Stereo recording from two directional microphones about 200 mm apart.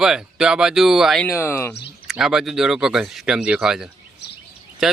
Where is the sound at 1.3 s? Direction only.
15° left (ahead or behind).